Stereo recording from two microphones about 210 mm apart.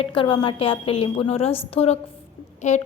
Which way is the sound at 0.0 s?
25° left (ahead or behind).